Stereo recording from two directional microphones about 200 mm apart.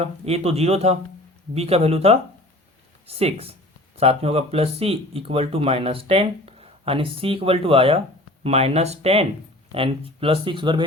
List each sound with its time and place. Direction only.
0.0 s speech: 30° right (ahead or behind)